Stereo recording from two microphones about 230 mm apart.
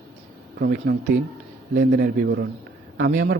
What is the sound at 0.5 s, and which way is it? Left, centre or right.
A man's voice, right.